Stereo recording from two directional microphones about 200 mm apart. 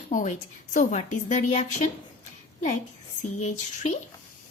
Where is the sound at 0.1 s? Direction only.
40° left (ahead or behind).